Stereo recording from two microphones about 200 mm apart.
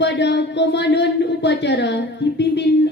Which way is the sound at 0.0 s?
60° left (ahead or behind).